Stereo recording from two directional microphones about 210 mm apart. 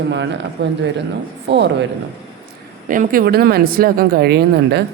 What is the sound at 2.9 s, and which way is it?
Speech, 40° right (ahead or behind).